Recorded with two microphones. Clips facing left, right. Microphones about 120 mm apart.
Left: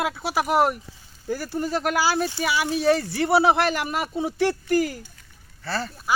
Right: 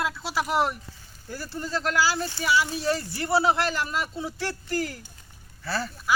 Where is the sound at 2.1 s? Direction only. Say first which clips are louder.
Left 1 dB; 65° left (ahead or behind).